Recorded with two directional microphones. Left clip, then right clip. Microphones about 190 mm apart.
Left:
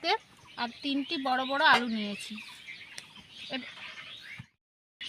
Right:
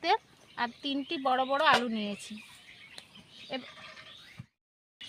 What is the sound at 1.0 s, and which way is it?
Speech, 30° right (ahead or behind).